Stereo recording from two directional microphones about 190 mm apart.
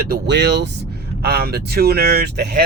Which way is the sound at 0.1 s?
65° right (ahead or behind).